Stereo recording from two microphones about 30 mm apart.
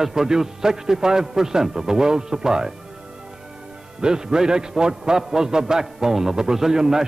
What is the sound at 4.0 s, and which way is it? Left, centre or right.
A man's voice, right.